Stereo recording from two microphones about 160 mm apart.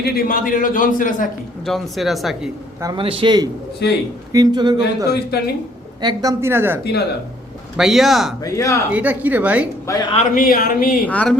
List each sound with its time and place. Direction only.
0.0 s a man's voice: 70° left (ahead or behind)
1.6 s speech: centre (ahead or behind)
2.8 s speech: 30° right (ahead or behind)
3.8 s a man's voice: 90° left
4.3 s speech: 25° right (ahead or behind)
7.8 s speech: centre (ahead or behind)
8.4 s speech: 20° left (ahead or behind)
8.9 s speech: 10° right (ahead or behind)
10.2 s a man's voice: 60° left (ahead or behind)
11.0 s speech: 10° left (ahead or behind)